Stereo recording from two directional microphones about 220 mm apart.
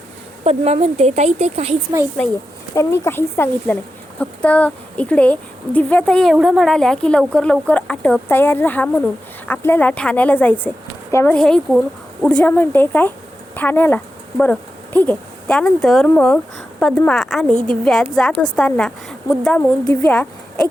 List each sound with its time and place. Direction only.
0.4 s a woman's voice: 30° right (ahead or behind)
2.7 s speech: 10° left (ahead or behind)